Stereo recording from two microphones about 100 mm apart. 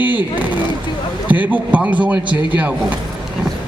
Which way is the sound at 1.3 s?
15° right (ahead or behind).